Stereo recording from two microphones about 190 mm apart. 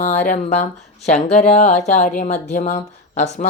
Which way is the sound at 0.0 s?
40° left (ahead or behind).